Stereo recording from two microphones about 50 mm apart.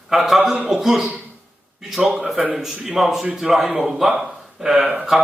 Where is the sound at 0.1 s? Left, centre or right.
Centre.